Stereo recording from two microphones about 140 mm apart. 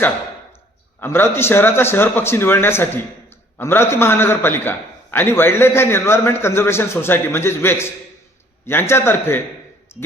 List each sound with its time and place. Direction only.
0.9 s a man's voice: 15° left (ahead or behind)